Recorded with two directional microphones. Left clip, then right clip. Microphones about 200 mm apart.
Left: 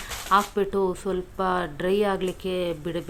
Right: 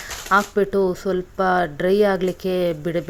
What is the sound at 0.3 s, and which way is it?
Speech, 25° right (ahead or behind).